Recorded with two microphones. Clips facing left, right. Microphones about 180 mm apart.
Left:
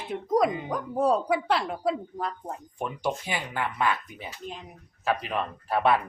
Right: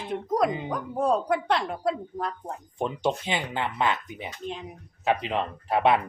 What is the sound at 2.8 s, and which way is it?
Speech, 25° right (ahead or behind).